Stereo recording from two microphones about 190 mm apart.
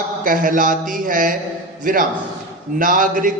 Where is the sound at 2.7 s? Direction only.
45° right (ahead or behind).